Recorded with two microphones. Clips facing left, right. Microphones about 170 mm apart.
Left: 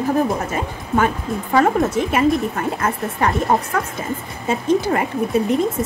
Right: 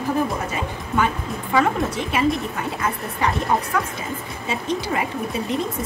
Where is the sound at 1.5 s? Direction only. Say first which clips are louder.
Left 4 dB; 45° left (ahead or behind).